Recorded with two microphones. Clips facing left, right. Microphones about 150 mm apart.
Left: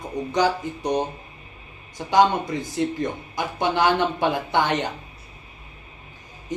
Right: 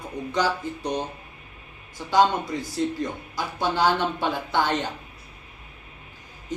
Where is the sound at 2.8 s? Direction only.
70° left (ahead or behind).